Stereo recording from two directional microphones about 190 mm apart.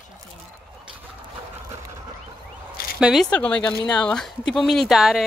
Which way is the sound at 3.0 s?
Centre (ahead or behind).